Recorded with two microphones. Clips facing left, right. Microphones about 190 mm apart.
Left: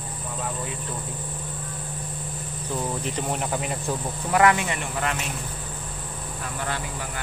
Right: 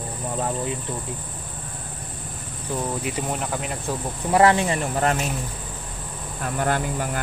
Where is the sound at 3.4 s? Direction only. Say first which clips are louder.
Even; centre (ahead or behind).